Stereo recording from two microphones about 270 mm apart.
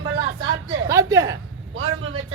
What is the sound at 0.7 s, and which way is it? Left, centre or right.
Speech, centre.